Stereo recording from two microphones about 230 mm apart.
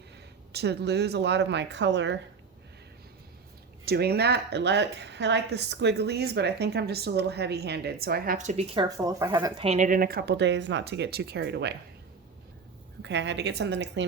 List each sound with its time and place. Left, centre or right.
0.5 s a woman's voice: right
3.8 s a woman's voice: right
13.0 s a woman's voice: right